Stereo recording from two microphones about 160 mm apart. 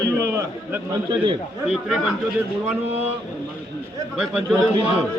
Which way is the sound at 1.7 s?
5° right (ahead or behind).